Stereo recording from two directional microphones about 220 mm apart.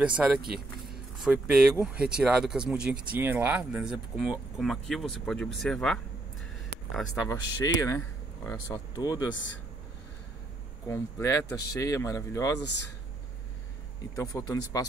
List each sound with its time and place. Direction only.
0.0 s speech: 5° right (ahead or behind)
7.2 s speech: 15° left (ahead or behind)
9.3 s speech: 55° left (ahead or behind)
10.9 s speech: 15° left (ahead or behind)
14.1 s speech: 15° left (ahead or behind)